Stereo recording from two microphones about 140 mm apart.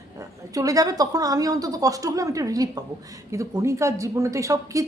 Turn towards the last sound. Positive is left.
turn(degrees=-20)  # may be behind; listen again after turning